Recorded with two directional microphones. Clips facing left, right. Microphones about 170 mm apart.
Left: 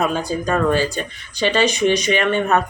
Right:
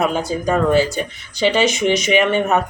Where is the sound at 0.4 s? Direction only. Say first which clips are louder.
Right 3 dB; 15° right (ahead or behind).